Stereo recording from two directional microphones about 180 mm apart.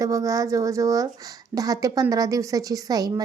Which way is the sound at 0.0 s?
20° right (ahead or behind).